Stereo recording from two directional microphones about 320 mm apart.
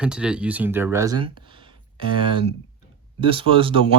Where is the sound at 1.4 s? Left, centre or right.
Centre.